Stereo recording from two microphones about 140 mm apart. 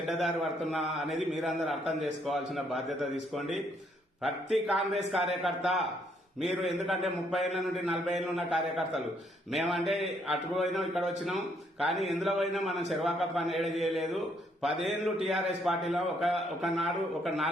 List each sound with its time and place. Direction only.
0.1 s a man's voice: centre (ahead or behind)